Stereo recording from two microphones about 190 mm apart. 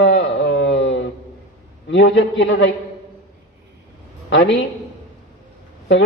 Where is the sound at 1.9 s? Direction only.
70° left (ahead or behind).